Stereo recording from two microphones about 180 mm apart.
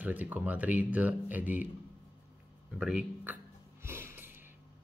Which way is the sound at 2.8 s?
5° right (ahead or behind).